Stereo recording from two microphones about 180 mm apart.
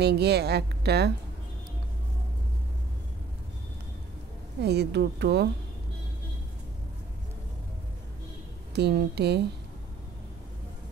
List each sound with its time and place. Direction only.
0.0 s a woman's voice: 65° right (ahead or behind)
4.6 s a woman's voice: 65° right (ahead or behind)
8.7 s a woman's voice: 65° right (ahead or behind)